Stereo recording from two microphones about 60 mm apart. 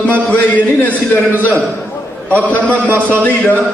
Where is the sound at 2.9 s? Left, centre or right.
Right.